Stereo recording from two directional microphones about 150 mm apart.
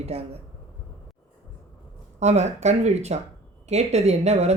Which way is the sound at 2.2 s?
50° right (ahead or behind).